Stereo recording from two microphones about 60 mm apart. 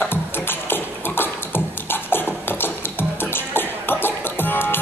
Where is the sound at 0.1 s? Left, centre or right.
Left.